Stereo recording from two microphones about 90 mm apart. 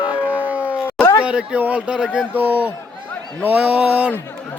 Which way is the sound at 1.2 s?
10° right (ahead or behind).